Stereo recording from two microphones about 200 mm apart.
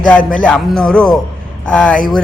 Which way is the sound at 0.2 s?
40° left (ahead or behind).